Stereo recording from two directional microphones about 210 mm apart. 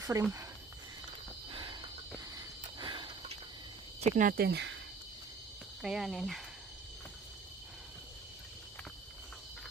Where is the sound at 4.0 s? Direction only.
40° right (ahead or behind).